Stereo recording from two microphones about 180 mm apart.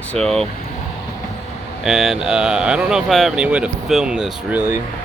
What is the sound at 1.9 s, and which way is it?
Speech, centre (ahead or behind).